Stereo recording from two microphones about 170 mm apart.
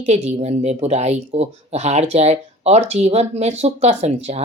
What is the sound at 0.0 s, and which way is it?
Speech, 40° right (ahead or behind).